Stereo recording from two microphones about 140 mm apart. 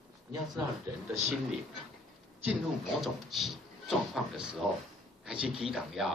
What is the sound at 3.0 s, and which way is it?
Speech, centre (ahead or behind).